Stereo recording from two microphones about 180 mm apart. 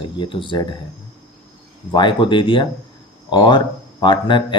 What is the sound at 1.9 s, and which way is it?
Speech, 25° left (ahead or behind).